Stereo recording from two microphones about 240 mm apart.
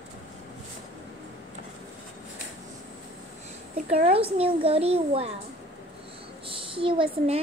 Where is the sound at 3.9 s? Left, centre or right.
Right.